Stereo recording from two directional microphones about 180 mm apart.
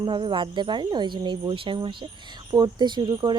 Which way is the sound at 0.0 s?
25° right (ahead or behind).